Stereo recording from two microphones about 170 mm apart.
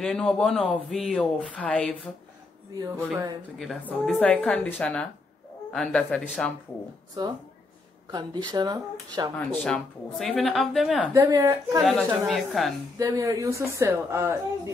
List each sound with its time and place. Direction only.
0.0 s speech: 5° left (ahead or behind)
3.5 s speech: centre (ahead or behind)
7.2 s speech: 25° right (ahead or behind)
9.6 s speech: 5° left (ahead or behind)
11.1 s speech: 20° right (ahead or behind)
11.8 s speech: centre (ahead or behind)
12.9 s a woman's voice: 20° right (ahead or behind)